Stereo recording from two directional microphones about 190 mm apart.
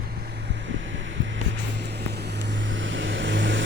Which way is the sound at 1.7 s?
60° right (ahead or behind).